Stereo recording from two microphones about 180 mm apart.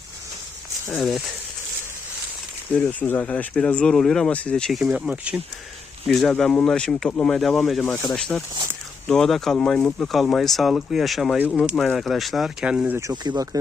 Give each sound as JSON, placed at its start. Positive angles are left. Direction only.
{"t": 0.9, "sound": "speech", "side_deg": 0}
{"t": 2.7, "sound": "speech", "side_deg": 10}
{"t": 6.1, "sound": "speech", "side_deg": 5}
{"t": 11.7, "sound": "speech", "side_deg": 5}
{"t": 13.0, "sound": "speech", "side_deg": -20}